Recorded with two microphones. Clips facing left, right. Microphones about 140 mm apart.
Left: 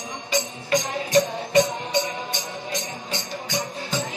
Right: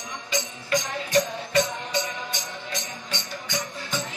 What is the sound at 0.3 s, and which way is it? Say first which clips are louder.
Music: left 3 dB; 25° left (ahead or behind).